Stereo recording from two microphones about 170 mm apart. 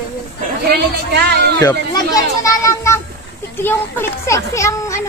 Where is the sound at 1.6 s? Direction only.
20° left (ahead or behind).